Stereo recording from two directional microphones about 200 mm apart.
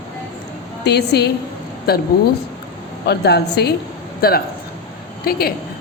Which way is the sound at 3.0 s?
55° left (ahead or behind).